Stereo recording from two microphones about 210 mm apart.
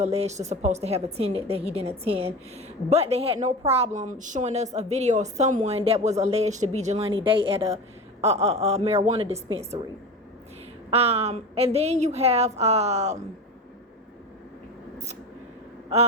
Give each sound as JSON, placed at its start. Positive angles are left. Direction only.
{"t": 0.0, "sound": "a woman's voice", "side_deg": -30}
{"t": 10.9, "sound": "a woman's voice", "side_deg": -30}